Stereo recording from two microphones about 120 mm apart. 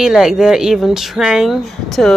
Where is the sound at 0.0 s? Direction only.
5° right (ahead or behind).